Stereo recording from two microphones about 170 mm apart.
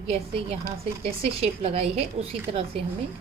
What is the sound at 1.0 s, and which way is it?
A woman's voice, 35° right (ahead or behind).